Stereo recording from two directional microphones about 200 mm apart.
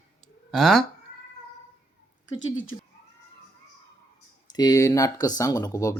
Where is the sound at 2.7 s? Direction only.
20° left (ahead or behind).